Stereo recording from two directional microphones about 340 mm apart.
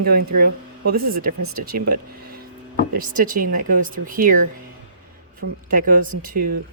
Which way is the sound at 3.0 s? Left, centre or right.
Right.